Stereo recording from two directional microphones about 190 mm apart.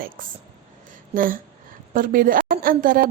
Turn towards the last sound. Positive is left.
turn(degrees=-50)  # may be behind; listen again after turning